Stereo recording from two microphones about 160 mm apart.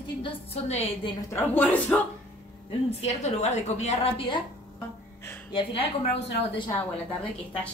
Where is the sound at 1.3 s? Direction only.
15° left (ahead or behind).